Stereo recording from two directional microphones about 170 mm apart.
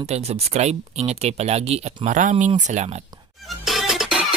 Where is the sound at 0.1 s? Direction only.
40° right (ahead or behind).